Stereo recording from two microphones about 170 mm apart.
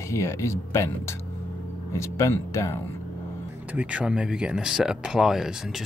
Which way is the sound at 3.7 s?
10° right (ahead or behind).